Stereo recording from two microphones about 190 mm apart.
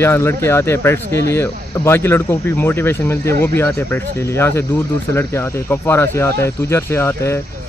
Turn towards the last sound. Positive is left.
turn(degrees=15)  # may be behind; listen again after turning